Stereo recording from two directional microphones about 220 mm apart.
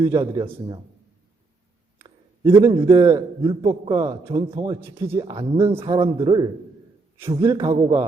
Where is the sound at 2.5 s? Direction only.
20° right (ahead or behind).